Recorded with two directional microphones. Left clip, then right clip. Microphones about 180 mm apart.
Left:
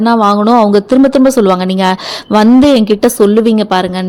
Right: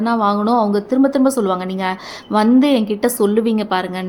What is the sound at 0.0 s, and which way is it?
Speech, 35° left (ahead or behind).